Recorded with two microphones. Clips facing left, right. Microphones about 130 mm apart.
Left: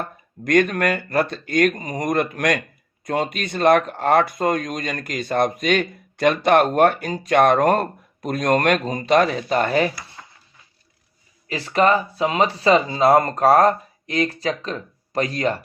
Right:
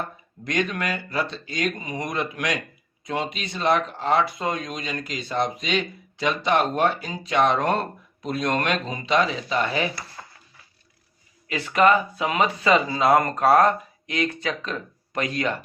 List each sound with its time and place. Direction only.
0.4 s speech: 50° left (ahead or behind)
11.4 s speech: 35° left (ahead or behind)